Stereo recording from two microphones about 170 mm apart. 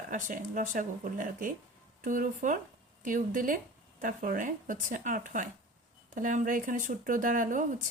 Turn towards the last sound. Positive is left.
turn(degrees=-50)  # may be behind; listen again after turning